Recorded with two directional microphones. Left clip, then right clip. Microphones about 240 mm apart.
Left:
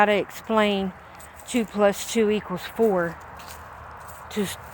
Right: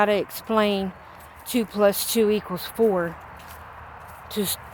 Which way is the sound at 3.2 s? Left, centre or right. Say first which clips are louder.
Left 1 dB; left.